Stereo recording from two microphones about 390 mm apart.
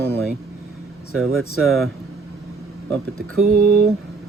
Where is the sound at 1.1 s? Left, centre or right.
Right.